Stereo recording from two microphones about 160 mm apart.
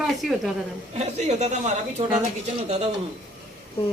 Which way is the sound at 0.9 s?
45° right (ahead or behind).